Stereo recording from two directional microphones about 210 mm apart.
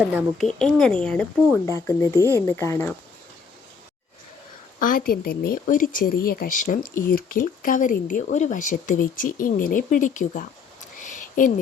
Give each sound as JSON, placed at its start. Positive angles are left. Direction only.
{"t": 0.2, "sound": "speech", "side_deg": 0}
{"t": 1.7, "sound": "speech", "side_deg": 15}
{"t": 4.8, "sound": "speech", "side_deg": 40}
{"t": 11.0, "sound": "a sound", "side_deg": 40}